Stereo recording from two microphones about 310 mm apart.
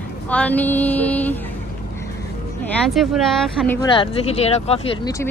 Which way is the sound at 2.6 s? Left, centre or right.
Centre.